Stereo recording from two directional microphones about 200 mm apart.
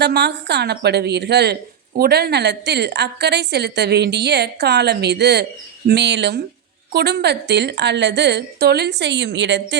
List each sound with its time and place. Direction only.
0.0 s a woman's voice: 55° right (ahead or behind)